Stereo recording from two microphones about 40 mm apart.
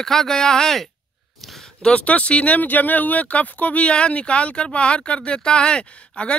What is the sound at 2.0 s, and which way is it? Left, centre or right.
Speech, left.